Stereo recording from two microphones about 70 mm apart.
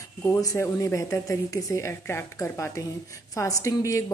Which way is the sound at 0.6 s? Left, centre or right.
Left.